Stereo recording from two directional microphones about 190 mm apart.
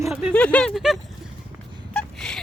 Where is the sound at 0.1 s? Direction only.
5° right (ahead or behind).